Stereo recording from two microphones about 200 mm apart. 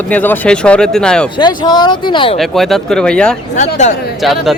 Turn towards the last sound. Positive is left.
turn(degrees=0)  # may be behind; listen again after turning